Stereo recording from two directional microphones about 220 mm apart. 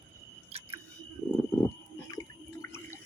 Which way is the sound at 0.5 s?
30° right (ahead or behind).